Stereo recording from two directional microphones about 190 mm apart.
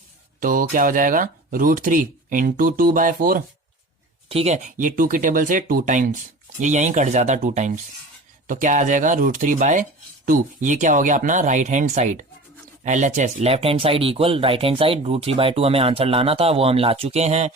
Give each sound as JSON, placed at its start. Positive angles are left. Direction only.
{"t": 0.3, "sound": "speech", "side_deg": -45}
{"t": 4.3, "sound": "speech", "side_deg": -35}